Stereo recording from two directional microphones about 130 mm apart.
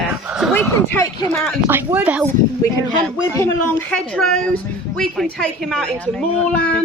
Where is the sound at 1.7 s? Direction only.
15° right (ahead or behind).